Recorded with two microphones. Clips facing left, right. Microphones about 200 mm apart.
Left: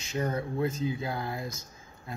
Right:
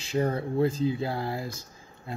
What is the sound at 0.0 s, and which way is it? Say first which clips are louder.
Speech: right 4 dB; 30° right (ahead or behind).